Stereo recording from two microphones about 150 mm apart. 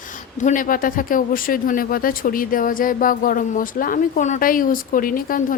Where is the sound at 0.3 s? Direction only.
60° left (ahead or behind).